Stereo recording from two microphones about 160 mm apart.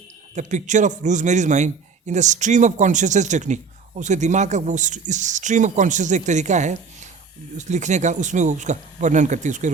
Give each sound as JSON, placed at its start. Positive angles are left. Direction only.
{"t": 0.3, "sound": "a man's voice", "side_deg": -50}